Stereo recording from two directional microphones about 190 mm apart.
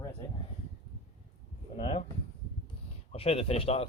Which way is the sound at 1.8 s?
30° left (ahead or behind).